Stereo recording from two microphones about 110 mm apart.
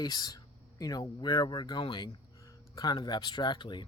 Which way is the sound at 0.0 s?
35° left (ahead or behind).